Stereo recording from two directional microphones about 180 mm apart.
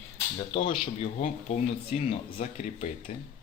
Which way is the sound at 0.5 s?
30° left (ahead or behind).